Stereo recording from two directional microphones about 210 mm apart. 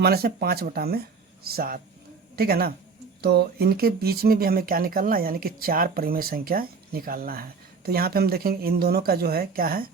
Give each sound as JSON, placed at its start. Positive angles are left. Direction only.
{"t": 0.0, "sound": "speech", "side_deg": -50}